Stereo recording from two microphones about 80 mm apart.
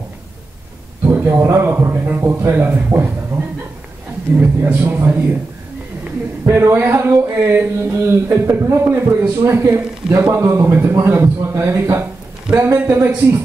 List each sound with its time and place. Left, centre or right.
1.1 s a man's voice: right
4.4 s a man's voice: right
6.4 s a sound: right